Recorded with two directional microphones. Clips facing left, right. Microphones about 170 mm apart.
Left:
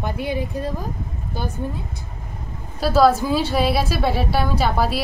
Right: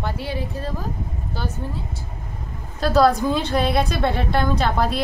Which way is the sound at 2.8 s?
5° left (ahead or behind).